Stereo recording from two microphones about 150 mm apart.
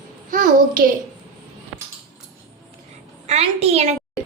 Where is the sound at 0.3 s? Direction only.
65° right (ahead or behind).